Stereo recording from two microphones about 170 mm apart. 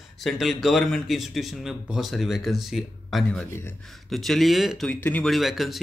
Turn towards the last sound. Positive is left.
turn(degrees=0)  # may be behind; listen again after turning